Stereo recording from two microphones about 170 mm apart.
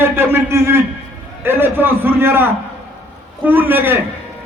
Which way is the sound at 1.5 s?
10° right (ahead or behind).